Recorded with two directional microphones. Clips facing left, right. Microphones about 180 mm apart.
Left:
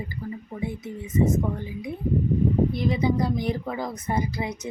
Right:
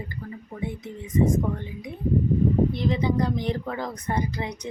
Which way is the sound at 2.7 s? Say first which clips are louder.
Left 1 dB; 10° left (ahead or behind).